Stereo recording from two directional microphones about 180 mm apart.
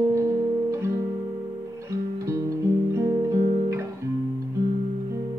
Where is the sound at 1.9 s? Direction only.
15° right (ahead or behind).